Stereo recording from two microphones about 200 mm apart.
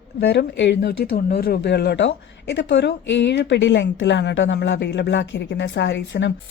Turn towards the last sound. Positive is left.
turn(degrees=60)  # may be behind; listen again after turning